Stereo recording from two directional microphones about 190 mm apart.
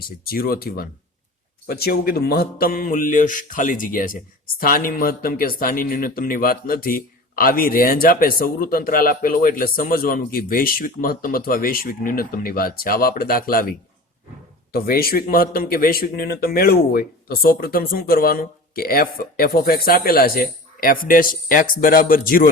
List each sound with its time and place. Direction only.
0.3 s speech: 50° left (ahead or behind)